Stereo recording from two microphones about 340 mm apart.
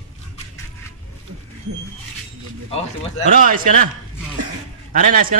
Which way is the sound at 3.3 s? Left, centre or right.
Right.